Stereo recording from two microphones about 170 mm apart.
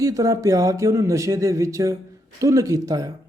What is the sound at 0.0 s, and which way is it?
A man's voice, 20° right (ahead or behind).